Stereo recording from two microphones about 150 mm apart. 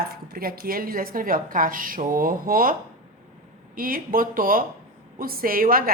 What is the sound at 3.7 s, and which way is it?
A woman's voice, 70° right (ahead or behind).